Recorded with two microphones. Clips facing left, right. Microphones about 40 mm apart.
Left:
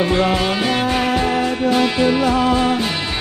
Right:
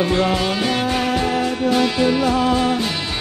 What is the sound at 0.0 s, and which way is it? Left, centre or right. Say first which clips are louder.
Music: left 1 dB; left.